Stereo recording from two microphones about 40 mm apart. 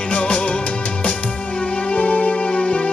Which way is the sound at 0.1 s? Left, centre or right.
Left.